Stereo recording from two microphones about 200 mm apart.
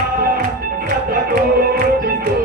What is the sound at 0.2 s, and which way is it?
Music, 50° right (ahead or behind).